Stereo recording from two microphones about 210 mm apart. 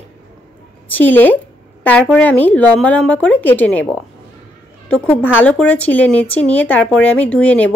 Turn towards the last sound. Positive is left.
turn(degrees=5)  # may be behind; listen again after turning